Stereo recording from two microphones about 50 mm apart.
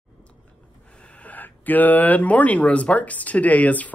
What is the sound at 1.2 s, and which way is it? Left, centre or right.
Speech, left.